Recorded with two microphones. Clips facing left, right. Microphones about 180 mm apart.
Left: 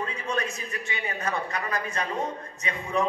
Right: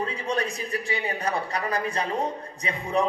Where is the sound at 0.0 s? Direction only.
35° right (ahead or behind).